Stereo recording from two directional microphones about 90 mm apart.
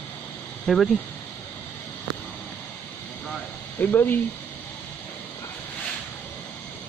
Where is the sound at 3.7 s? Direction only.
20° left (ahead or behind).